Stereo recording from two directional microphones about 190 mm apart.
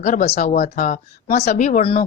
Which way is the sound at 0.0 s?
40° left (ahead or behind).